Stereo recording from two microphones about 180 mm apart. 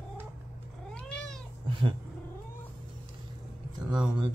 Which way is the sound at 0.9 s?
5° left (ahead or behind).